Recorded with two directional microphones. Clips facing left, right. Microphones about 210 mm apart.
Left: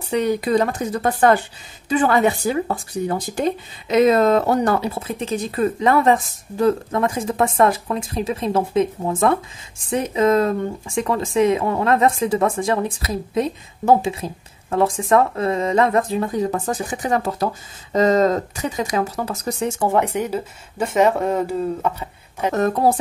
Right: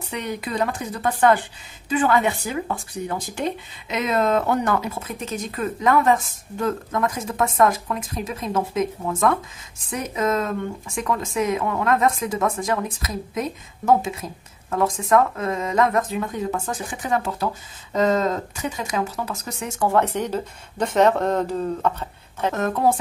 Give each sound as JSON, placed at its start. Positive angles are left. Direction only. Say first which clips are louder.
{"t": 0.1, "sound": "speech", "louder": "left 10 dB", "side_deg": 35}
{"t": 19.8, "sound": "speech", "louder": "right 1 dB", "side_deg": 20}
{"t": 22.5, "sound": "speech", "louder": "left 3 dB", "side_deg": 40}